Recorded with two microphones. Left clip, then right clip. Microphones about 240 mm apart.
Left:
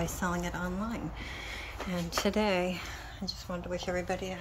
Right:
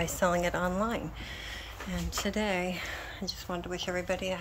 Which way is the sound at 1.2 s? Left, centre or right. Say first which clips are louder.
Left 1 dB; centre.